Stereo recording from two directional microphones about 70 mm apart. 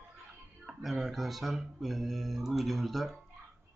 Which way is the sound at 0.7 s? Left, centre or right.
Centre.